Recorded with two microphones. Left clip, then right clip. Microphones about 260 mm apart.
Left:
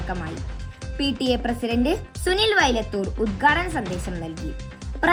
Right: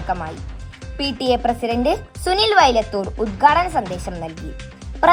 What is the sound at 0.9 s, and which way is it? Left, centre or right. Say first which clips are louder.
Speech: right 4 dB; right.